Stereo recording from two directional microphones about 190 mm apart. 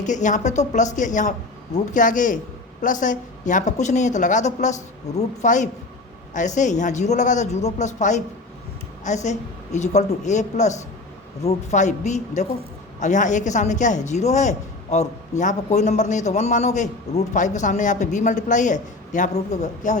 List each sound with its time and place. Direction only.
0.0 s a man's voice: 40° left (ahead or behind)